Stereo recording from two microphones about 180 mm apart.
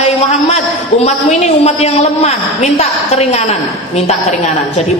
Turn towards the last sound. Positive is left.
turn(degrees=35)  # may be behind; listen again after turning